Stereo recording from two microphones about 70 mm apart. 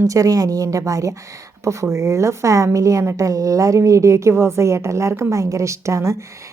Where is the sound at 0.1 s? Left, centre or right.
Right.